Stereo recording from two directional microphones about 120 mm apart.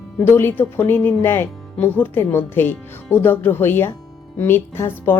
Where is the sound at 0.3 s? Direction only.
20° left (ahead or behind).